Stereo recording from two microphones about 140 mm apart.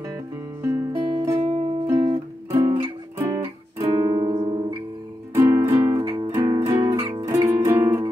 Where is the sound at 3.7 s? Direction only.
30° right (ahead or behind).